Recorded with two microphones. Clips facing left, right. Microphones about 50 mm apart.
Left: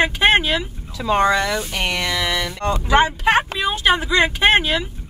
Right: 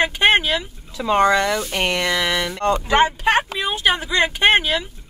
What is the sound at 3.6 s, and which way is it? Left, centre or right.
Speech, centre.